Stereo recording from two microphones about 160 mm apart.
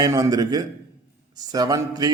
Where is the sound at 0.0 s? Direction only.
20° right (ahead or behind).